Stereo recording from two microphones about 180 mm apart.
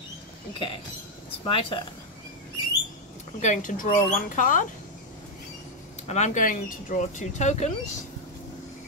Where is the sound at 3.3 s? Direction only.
45° left (ahead or behind).